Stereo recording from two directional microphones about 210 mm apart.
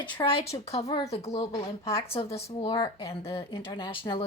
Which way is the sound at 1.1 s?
30° left (ahead or behind).